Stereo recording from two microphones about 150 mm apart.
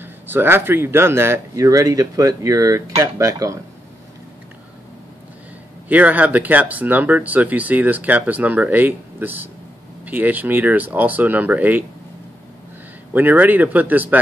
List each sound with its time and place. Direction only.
0.0 s speech: 15° right (ahead or behind)
5.9 s speech: 10° right (ahead or behind)
13.1 s speech: 10° right (ahead or behind)